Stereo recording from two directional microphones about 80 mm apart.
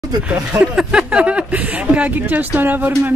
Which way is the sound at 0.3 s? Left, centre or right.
Centre.